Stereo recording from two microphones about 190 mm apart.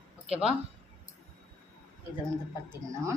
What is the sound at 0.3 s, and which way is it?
Speech, 5° right (ahead or behind).